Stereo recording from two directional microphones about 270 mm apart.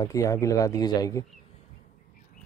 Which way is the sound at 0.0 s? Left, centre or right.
Centre.